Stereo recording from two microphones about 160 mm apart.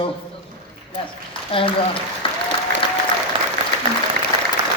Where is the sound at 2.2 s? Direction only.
35° left (ahead or behind).